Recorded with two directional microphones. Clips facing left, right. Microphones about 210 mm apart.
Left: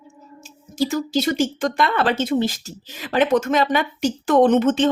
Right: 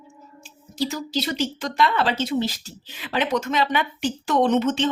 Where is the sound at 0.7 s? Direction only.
50° left (ahead or behind).